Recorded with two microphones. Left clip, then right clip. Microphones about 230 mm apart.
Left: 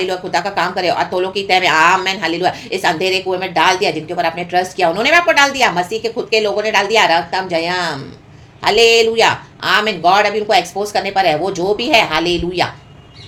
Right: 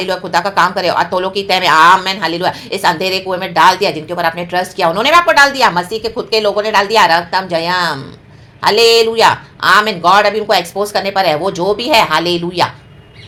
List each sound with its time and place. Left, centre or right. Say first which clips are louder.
0.0 s speech: right 3 dB; centre